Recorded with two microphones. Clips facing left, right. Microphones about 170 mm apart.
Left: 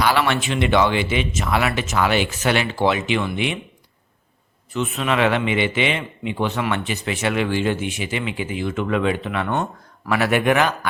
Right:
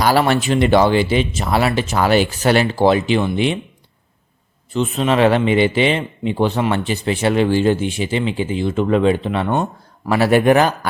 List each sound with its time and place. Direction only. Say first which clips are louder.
0.0 s a man's voice: right 4 dB; 40° right (ahead or behind)
4.7 s a man's voice: right 5 dB; 30° right (ahead or behind)